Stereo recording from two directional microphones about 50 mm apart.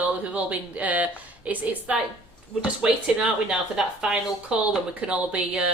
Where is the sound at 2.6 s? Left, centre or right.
Centre.